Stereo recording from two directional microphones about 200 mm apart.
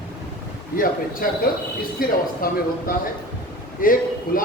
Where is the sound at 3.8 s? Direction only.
45° left (ahead or behind).